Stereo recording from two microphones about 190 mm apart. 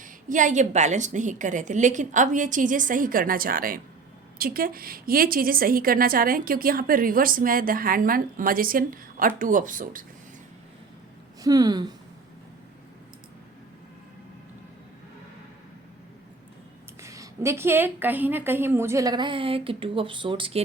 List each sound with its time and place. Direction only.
0.0 s a woman's voice: 45° right (ahead or behind)
11.4 s speech: 20° right (ahead or behind)
17.0 s a woman's voice: 15° right (ahead or behind)